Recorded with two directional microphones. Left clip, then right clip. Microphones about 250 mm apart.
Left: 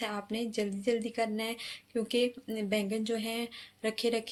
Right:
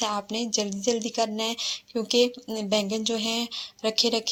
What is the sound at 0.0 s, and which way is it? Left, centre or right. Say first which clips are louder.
A woman's voice: right 7 dB; centre.